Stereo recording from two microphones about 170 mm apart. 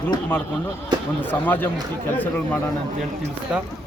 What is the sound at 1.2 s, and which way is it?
Speech, 10° left (ahead or behind).